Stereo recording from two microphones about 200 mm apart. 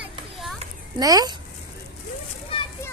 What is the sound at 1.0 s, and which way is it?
Speech, 20° right (ahead or behind).